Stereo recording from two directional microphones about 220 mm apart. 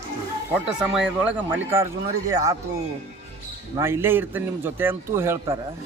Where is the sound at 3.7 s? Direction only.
10° right (ahead or behind).